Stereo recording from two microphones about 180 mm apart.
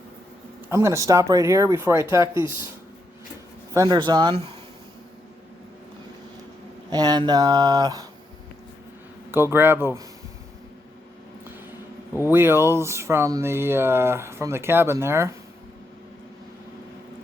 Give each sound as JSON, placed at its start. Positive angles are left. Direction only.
{"t": 0.7, "sound": "speech", "side_deg": -15}
{"t": 3.8, "sound": "speech", "side_deg": -25}
{"t": 6.9, "sound": "speech", "side_deg": -25}
{"t": 9.3, "sound": "speech", "side_deg": -15}
{"t": 12.3, "sound": "speech", "side_deg": -15}